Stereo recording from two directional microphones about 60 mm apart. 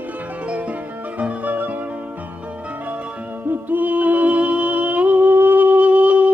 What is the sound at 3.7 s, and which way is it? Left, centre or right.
Music, right.